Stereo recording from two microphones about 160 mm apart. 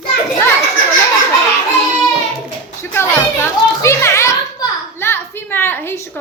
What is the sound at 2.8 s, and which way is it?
A woman's voice, 15° left (ahead or behind).